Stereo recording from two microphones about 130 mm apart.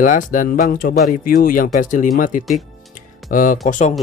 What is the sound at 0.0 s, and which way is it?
Speech, 85° left.